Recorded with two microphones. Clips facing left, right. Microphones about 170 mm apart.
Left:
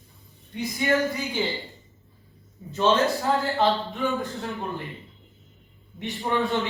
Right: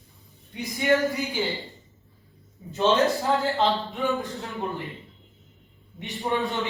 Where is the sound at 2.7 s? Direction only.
20° right (ahead or behind).